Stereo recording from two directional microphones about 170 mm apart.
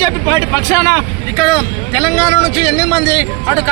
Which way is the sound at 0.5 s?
20° left (ahead or behind).